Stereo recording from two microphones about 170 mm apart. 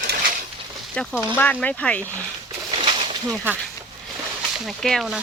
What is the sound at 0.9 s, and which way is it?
Speech, 5° left (ahead or behind).